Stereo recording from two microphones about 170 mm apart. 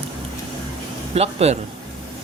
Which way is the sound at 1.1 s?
40° right (ahead or behind).